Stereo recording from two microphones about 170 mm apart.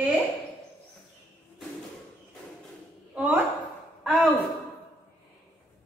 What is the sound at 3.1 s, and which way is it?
Speech, 10° right (ahead or behind).